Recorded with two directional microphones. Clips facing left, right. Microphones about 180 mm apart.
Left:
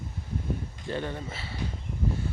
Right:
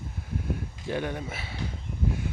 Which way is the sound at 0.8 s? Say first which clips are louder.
Right 3 dB; 10° right (ahead or behind).